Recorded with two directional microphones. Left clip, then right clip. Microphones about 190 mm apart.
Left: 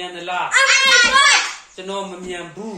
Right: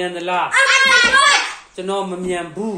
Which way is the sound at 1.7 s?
40° right (ahead or behind).